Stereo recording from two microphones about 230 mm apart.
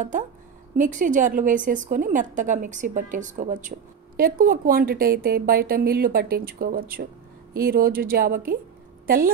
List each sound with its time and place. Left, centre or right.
0.7 s a woman's voice: right